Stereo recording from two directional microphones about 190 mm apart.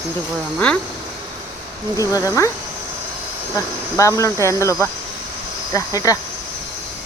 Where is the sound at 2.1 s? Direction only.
15° left (ahead or behind).